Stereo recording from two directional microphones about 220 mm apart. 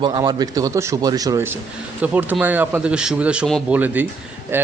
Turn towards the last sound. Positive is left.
turn(degrees=-10)  # may be behind; listen again after turning